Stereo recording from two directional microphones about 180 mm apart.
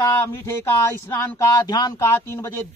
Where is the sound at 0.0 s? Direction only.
15° left (ahead or behind).